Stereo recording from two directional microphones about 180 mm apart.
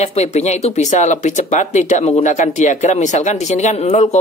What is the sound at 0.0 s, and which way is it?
Speech, 35° left (ahead or behind).